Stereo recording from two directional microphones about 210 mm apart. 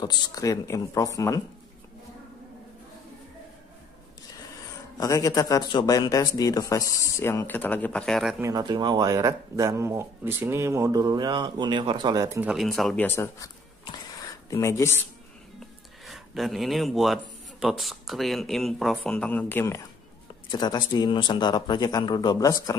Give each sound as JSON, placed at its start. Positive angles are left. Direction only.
{"t": 0.0, "sound": "a man's voice", "side_deg": 20}
{"t": 4.9, "sound": "a man's voice", "side_deg": 15}
{"t": 8.4, "sound": "speech", "side_deg": -15}
{"t": 13.9, "sound": "a sound", "side_deg": 15}
{"t": 16.1, "sound": "speech", "side_deg": 0}